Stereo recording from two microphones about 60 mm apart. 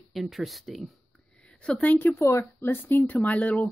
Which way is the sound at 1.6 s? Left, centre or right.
Centre.